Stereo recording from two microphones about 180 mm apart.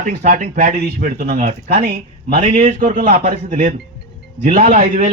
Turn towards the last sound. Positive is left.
turn(degrees=-40)  # may be behind; listen again after turning